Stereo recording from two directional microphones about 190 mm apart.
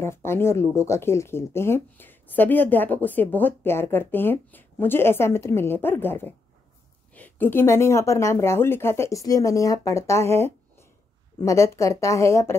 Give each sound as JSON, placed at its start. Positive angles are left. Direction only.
{"t": 0.0, "sound": "speech", "side_deg": 15}